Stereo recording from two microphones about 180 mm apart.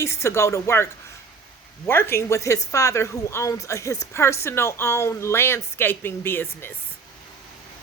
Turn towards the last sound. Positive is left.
turn(degrees=10)  # may be behind; listen again after turning